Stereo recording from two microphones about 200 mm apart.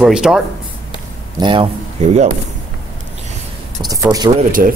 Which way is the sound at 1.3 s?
25° right (ahead or behind).